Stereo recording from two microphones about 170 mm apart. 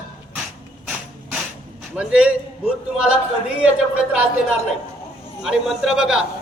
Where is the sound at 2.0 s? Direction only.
5° right (ahead or behind).